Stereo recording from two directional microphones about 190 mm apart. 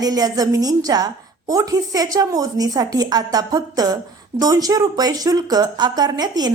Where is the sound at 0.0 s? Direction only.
20° right (ahead or behind).